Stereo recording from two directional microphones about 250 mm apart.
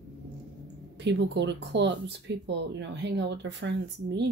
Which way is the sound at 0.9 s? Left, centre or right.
Right.